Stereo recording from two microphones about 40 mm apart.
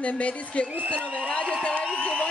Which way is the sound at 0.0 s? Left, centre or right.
Left.